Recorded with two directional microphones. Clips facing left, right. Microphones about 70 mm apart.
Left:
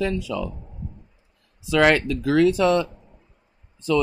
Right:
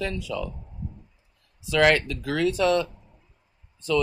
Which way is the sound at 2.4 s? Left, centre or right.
Centre.